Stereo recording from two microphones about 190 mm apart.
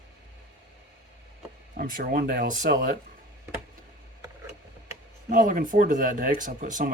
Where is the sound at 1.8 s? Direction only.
50° right (ahead or behind).